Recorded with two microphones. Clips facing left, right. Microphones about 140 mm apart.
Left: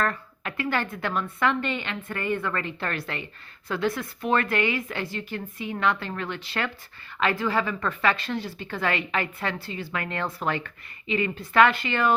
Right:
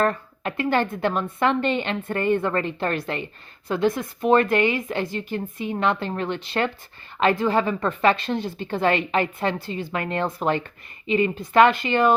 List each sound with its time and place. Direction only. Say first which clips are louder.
0.0 s a woman's voice: right 5 dB; 25° right (ahead or behind)